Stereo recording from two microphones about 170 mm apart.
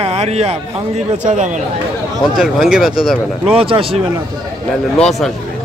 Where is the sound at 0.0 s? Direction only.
40° right (ahead or behind).